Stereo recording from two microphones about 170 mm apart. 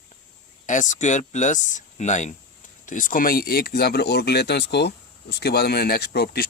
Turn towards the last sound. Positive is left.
turn(degrees=70)  # may be behind; listen again after turning